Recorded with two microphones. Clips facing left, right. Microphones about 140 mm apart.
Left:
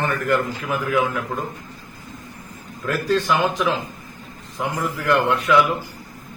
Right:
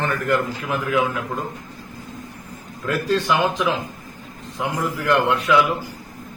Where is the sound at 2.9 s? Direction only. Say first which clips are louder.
Even; 15° right (ahead or behind).